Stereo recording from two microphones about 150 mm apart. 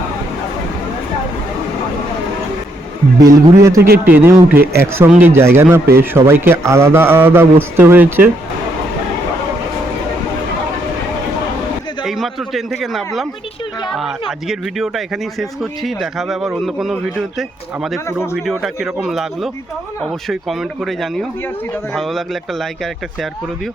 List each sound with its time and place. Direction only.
3.2 s a man's voice: 25° right (ahead or behind)
12.0 s a sound: centre (ahead or behind)
12.8 s speech: centre (ahead or behind)